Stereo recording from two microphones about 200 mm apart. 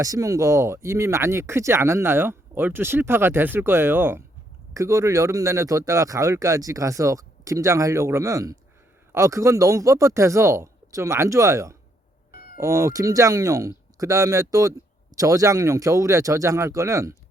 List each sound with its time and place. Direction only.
0.0 s speech: 15° right (ahead or behind)